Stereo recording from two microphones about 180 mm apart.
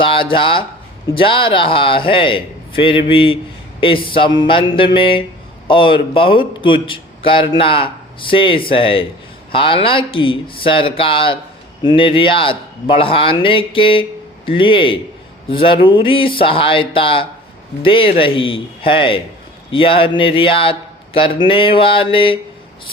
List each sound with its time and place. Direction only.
0.0 s a man's voice: 30° left (ahead or behind)